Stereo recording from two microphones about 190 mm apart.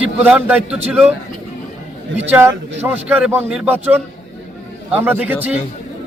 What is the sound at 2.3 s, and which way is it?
Speech, 10° right (ahead or behind).